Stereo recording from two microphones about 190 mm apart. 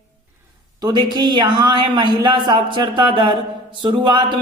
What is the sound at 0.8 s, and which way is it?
A man's voice, 20° right (ahead or behind).